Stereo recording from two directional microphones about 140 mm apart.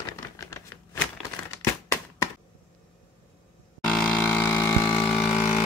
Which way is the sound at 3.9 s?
5° left (ahead or behind).